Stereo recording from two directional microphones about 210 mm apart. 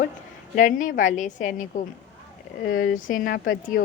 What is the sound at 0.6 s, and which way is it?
A woman's voice, 35° left (ahead or behind).